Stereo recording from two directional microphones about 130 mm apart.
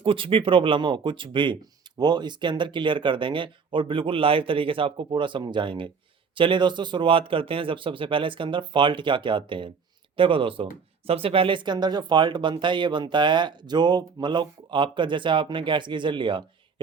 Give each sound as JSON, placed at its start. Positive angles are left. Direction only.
{"t": 0.0, "sound": "speech", "side_deg": -40}